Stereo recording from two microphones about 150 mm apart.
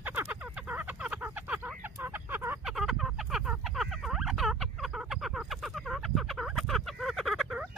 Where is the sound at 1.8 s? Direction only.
15° right (ahead or behind).